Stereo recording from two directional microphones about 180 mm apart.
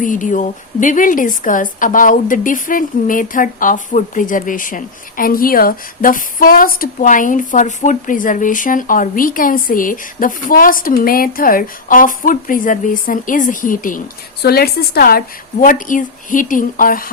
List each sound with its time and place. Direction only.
0.0 s a woman's voice: 45° left (ahead or behind)
14.4 s a woman's voice: 60° left (ahead or behind)
15.6 s a woman's voice: 45° left (ahead or behind)